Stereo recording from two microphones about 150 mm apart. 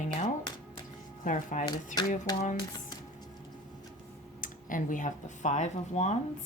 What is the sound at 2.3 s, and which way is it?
Speech, 25° left (ahead or behind).